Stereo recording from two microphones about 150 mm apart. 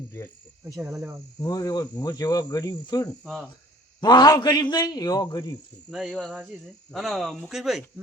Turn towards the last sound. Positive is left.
turn(degrees=0)  # may be behind; listen again after turning